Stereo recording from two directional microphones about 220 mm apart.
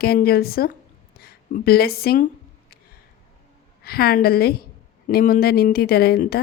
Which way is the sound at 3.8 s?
45° left (ahead or behind).